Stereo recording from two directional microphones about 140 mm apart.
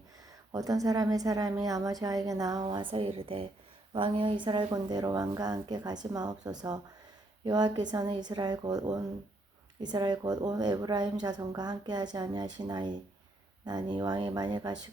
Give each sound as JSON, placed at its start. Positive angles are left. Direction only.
{"t": 0.3, "sound": "a woman's voice", "side_deg": -25}